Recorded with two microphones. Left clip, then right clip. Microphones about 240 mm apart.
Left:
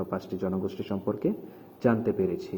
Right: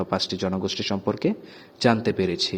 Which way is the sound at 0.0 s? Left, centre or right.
Right.